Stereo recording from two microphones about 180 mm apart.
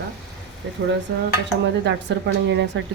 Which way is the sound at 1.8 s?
75° right (ahead or behind).